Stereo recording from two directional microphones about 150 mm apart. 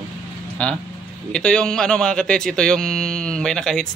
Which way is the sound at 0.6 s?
5° left (ahead or behind).